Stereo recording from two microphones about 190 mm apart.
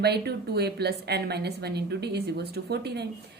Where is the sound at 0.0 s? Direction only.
60° right (ahead or behind).